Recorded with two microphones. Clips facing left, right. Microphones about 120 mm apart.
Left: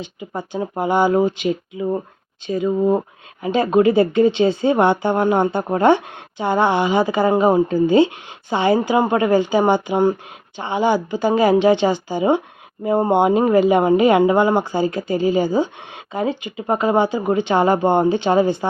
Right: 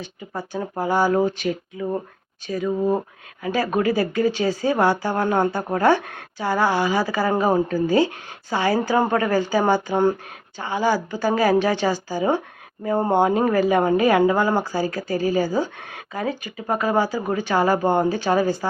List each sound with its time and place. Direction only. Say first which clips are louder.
0.0 s speech: left 3 dB; 20° left (ahead or behind)